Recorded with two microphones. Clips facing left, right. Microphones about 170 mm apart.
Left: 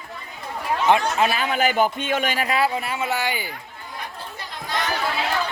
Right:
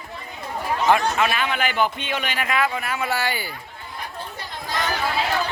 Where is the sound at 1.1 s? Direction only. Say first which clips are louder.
Left 1 dB; 35° left (ahead or behind); by 3.4 s 15° left (ahead or behind).